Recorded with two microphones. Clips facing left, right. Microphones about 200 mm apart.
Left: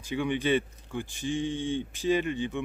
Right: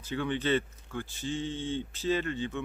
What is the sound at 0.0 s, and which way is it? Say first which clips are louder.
Speech: left 3 dB; 15° left (ahead or behind).